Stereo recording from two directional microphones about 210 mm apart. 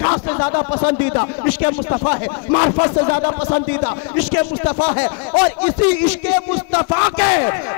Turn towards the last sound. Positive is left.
turn(degrees=15)  # may be behind; listen again after turning